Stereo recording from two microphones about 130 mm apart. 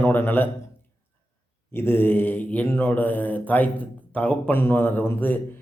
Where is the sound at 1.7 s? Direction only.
20° left (ahead or behind).